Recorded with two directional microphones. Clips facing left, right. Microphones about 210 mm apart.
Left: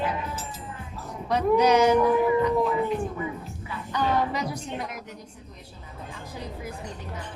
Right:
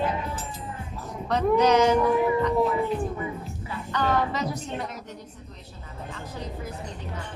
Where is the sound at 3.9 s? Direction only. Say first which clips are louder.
Even; 10° left (ahead or behind).